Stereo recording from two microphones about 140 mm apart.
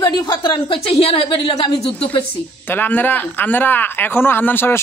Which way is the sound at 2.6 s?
15° left (ahead or behind).